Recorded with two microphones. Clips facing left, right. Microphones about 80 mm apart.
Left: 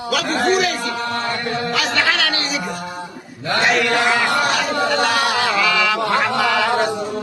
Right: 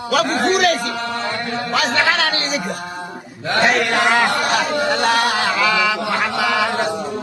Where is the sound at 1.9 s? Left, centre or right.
Right.